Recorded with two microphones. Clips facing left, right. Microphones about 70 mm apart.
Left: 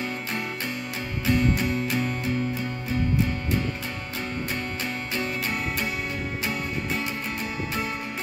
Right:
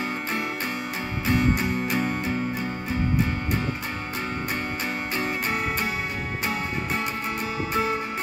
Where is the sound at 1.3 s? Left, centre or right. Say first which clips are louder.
Even; right.